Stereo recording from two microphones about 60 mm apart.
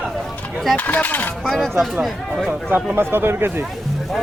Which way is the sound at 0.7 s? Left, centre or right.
Left.